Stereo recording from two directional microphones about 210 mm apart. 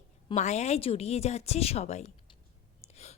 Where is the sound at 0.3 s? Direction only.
35° left (ahead or behind).